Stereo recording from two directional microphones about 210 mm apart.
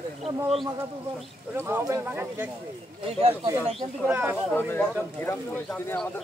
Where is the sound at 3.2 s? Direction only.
25° right (ahead or behind).